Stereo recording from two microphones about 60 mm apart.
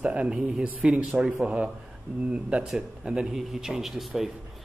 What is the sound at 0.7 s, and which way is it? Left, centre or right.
Speech, right.